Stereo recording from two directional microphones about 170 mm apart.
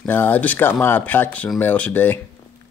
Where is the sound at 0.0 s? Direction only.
10° left (ahead or behind).